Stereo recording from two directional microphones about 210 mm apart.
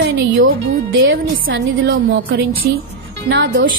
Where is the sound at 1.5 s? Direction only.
50° right (ahead or behind).